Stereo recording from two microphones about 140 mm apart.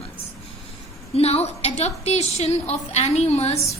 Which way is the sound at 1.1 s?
45° left (ahead or behind).